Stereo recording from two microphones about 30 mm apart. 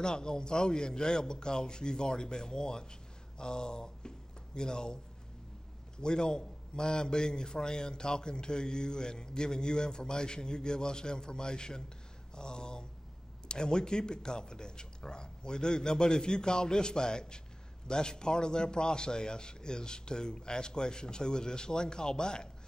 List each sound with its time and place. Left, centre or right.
0.0 s a man's voice: left
5.9 s a man's voice: left